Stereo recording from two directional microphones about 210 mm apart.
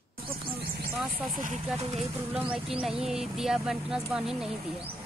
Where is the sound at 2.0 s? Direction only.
5° right (ahead or behind).